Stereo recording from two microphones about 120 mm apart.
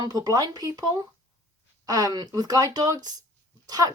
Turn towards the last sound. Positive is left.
turn(degrees=-30)  # may be behind; listen again after turning